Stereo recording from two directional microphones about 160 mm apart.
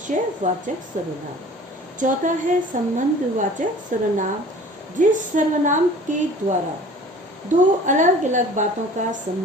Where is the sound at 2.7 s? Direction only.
55° right (ahead or behind).